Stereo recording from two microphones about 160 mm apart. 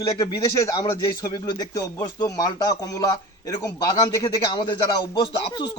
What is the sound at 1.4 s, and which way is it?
Speech, 25° left (ahead or behind).